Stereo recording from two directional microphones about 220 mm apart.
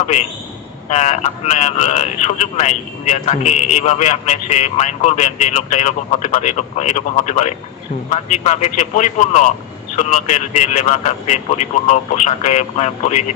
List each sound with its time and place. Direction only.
0.9 s speech: 30° left (ahead or behind)